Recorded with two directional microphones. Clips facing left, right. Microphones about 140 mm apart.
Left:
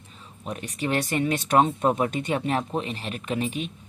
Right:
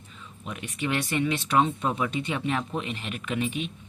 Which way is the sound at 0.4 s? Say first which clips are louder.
Left 2 dB; 40° left (ahead or behind).